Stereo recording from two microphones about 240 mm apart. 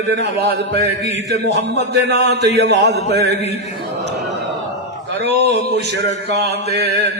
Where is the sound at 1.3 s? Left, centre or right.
Right.